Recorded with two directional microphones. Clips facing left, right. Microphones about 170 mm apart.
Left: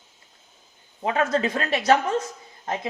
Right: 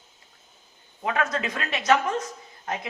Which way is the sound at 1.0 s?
30° left (ahead or behind).